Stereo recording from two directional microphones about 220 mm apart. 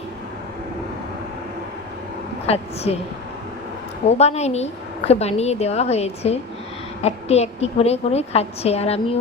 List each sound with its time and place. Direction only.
2.5 s a woman's voice: 30° left (ahead or behind)
4.2 s a woman's voice: 30° left (ahead or behind)